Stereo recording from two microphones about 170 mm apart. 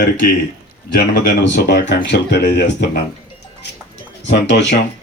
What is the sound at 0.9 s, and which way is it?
Speech, 65° left (ahead or behind).